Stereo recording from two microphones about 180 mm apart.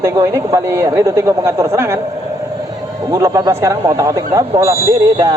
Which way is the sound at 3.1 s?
20° right (ahead or behind).